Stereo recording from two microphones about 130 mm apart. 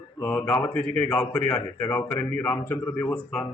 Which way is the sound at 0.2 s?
10° left (ahead or behind).